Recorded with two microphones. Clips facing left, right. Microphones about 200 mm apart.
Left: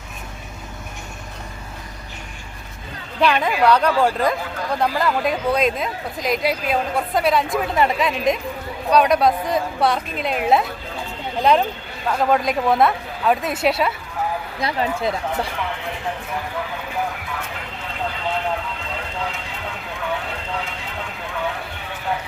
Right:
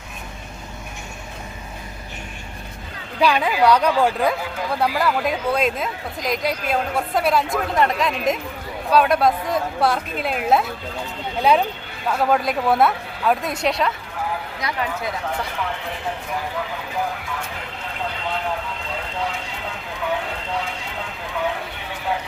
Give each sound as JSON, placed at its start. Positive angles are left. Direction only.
{"t": 3.2, "sound": "a woman's voice", "side_deg": -10}
{"t": 12.0, "sound": "speech", "side_deg": 0}
{"t": 14.6, "sound": "speech", "side_deg": 30}